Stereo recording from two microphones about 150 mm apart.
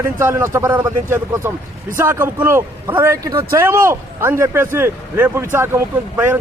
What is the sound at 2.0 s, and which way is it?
A man's voice, 15° right (ahead or behind).